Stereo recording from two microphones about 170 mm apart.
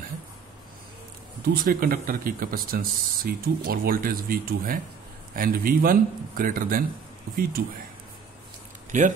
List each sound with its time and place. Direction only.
1.5 s speech: 60° right (ahead or behind)
7.6 s speech: 65° right (ahead or behind)
8.9 s speech: 45° right (ahead or behind)